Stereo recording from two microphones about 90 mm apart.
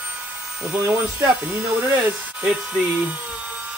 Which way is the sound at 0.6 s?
10° right (ahead or behind).